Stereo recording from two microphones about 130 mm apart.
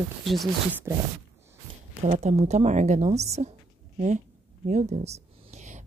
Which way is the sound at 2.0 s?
55° right (ahead or behind).